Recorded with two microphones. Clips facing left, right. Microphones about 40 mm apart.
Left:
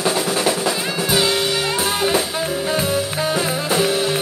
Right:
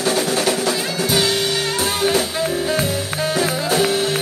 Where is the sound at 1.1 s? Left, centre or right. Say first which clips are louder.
Left 1 dB; centre.